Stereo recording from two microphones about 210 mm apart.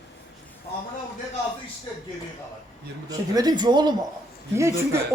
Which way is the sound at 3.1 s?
20° right (ahead or behind).